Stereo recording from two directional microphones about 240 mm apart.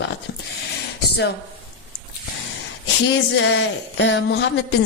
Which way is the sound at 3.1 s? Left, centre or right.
Left.